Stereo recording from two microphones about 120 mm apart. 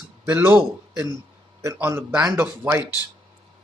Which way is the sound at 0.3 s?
15° right (ahead or behind).